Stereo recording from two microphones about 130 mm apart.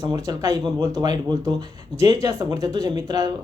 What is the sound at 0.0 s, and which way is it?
Speech, 25° right (ahead or behind).